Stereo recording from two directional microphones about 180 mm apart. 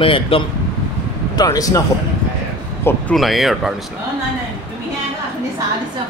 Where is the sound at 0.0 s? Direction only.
30° left (ahead or behind).